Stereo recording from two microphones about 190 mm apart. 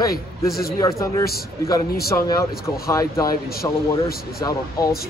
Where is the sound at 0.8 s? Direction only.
15° left (ahead or behind).